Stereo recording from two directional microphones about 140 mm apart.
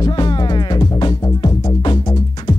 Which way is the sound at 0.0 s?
30° left (ahead or behind).